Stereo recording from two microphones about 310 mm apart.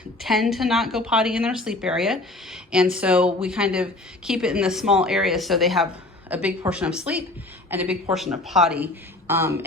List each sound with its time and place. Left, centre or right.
0.2 s a woman's voice: centre